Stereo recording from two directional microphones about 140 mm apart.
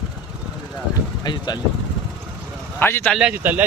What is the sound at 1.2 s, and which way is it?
Speech, 30° left (ahead or behind).